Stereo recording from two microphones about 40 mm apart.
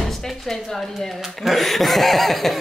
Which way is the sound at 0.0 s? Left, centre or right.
Centre.